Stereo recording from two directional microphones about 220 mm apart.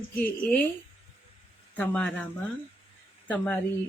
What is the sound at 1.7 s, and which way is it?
Speech, 5° left (ahead or behind).